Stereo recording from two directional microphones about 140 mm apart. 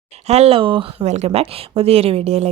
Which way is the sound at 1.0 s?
55° right (ahead or behind).